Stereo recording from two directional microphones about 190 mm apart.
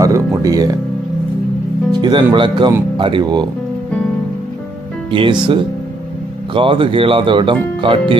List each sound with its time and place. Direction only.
0.0 s music: 15° right (ahead or behind)
1.9 s speech: 25° right (ahead or behind)
5.1 s speech: 25° right (ahead or behind)